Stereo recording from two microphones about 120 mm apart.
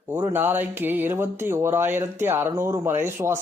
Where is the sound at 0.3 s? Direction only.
15° right (ahead or behind).